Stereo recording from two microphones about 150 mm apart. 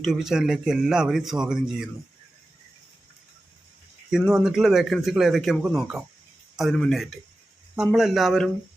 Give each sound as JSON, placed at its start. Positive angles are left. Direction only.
{"t": 0.0, "sound": "a man's voice", "side_deg": -5}
{"t": 4.3, "sound": "a man's voice", "side_deg": -5}